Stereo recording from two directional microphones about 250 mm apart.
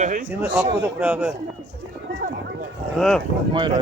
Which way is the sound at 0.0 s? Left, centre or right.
Right.